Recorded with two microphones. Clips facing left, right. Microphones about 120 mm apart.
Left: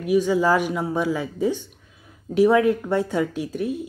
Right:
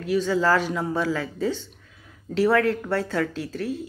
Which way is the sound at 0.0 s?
15° left (ahead or behind).